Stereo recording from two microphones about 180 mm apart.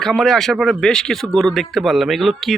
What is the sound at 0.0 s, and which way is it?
Speech, centre (ahead or behind).